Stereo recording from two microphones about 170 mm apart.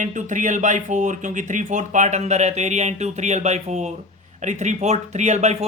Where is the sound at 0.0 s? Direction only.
45° right (ahead or behind).